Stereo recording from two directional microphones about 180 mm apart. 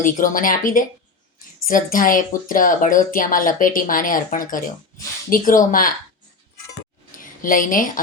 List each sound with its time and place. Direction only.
0.0 s speech: 50° left (ahead or behind)
7.2 s a woman's voice: 50° left (ahead or behind)